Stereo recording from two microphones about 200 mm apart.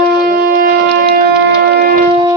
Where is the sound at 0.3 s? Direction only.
45° right (ahead or behind).